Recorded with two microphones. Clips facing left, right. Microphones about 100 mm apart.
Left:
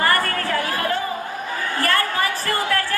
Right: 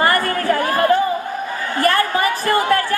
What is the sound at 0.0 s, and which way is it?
Chatter, 25° right (ahead or behind).